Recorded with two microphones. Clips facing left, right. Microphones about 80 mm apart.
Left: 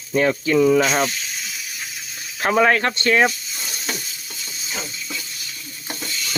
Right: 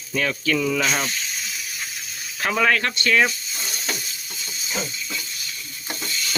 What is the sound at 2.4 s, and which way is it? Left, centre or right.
Speech, left.